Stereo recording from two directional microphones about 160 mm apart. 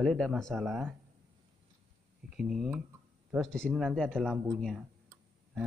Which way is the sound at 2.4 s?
5° right (ahead or behind).